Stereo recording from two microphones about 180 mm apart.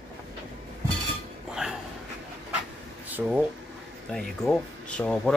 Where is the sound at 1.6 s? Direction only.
5° right (ahead or behind).